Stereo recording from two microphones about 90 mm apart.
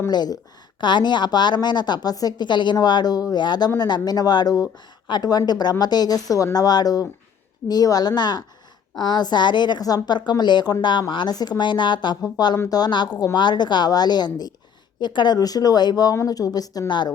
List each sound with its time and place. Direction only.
0.1 s a woman's voice: 50° left (ahead or behind)
12.6 s a woman's voice: 45° left (ahead or behind)